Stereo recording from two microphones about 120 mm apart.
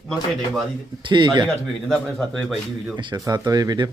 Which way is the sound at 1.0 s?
40° right (ahead or behind).